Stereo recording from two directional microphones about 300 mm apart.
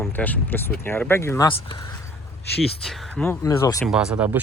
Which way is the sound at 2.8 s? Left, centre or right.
Centre.